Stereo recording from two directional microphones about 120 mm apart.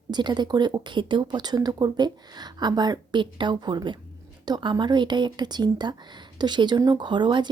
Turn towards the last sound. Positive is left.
turn(degrees=-40)  # may be behind; listen again after turning